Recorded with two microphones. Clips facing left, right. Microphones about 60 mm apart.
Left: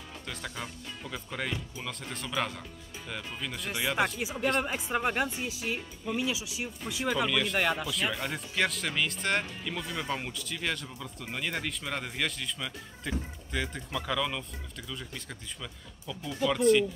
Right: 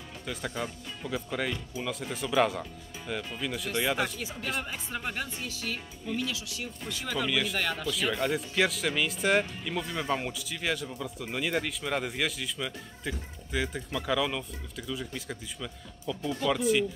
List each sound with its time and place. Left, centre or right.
0.3 s speech: centre
4.2 s speech: centre
7.2 s speech: centre
7.5 s speech: centre
7.9 s speech: centre